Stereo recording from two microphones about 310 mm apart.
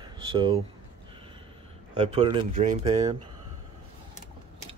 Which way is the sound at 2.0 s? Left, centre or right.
Centre.